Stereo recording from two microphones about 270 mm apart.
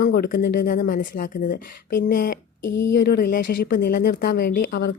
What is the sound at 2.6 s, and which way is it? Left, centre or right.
Speech, left.